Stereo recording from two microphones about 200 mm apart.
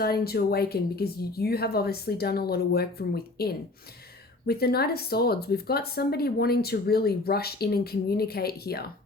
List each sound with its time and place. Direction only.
0.0 s speech: 50° left (ahead or behind)